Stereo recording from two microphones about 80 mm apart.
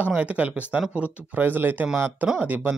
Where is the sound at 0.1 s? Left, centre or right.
Centre.